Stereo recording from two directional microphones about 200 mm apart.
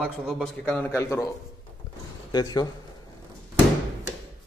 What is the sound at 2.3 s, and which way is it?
Speech, 20° left (ahead or behind).